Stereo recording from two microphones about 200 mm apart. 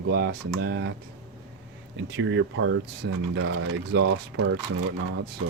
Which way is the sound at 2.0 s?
65° right (ahead or behind).